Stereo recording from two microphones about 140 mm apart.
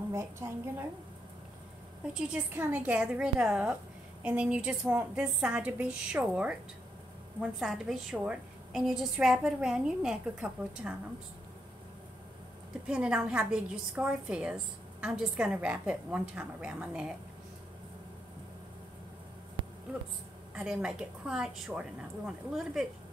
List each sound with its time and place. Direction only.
0.1 s a woman's voice: 20° right (ahead or behind)
2.1 s a woman's voice: 5° right (ahead or behind)
12.8 s a woman's voice: 5° right (ahead or behind)
20.5 s a woman's voice: 5° right (ahead or behind)